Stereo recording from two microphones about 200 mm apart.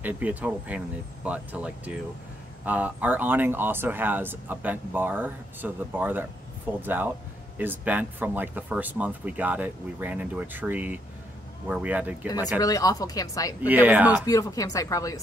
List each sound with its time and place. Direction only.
0.0 s speech: 10° right (ahead or behind)
12.5 s speech: 15° left (ahead or behind)
13.6 s speech: 10° right (ahead or behind)
14.2 s speech: 15° left (ahead or behind)